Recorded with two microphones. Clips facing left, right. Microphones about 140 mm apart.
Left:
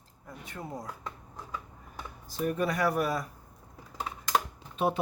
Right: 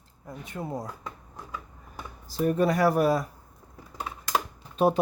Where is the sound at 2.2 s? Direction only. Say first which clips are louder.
Right 6 dB; 35° right (ahead or behind).